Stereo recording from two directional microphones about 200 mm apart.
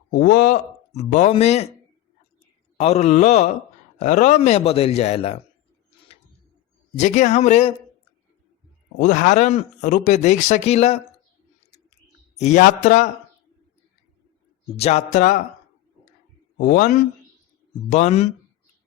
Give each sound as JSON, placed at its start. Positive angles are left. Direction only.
{"t": 0.1, "sound": "speech", "side_deg": 50}
{"t": 0.9, "sound": "speech", "side_deg": 35}
{"t": 2.7, "sound": "speech", "side_deg": 35}
{"t": 6.9, "sound": "speech", "side_deg": 35}
{"t": 9.0, "sound": "speech", "side_deg": 40}
{"t": 12.4, "sound": "speech", "side_deg": 35}
{"t": 14.8, "sound": "speech", "side_deg": 30}
{"t": 16.6, "sound": "speech", "side_deg": 45}